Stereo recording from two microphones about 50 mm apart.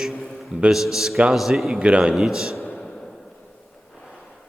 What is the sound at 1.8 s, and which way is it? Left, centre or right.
Speech, centre.